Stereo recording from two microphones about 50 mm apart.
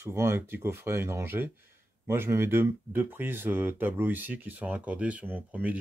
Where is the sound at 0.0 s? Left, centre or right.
Right.